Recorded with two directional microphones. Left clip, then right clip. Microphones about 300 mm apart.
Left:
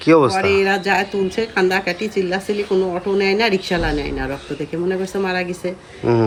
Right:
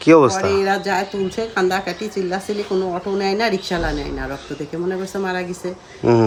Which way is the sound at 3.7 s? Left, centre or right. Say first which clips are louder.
Left 2 dB; centre.